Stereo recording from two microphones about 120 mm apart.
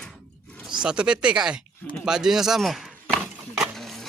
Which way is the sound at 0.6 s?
5° right (ahead or behind).